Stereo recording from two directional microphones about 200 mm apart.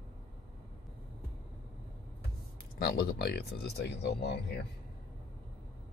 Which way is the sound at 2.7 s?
50° left (ahead or behind).